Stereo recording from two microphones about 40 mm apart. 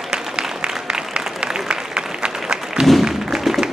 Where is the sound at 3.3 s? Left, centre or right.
Centre.